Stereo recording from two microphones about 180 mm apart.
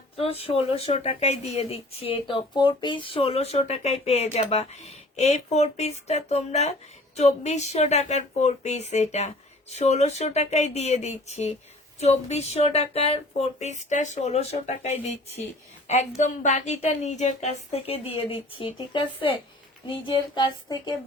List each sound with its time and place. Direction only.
0.2 s speech: 35° left (ahead or behind)